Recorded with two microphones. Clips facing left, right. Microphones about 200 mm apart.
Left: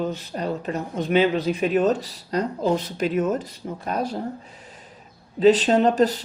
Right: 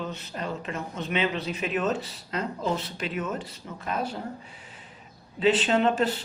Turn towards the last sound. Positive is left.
turn(degrees=40)  # may be behind; listen again after turning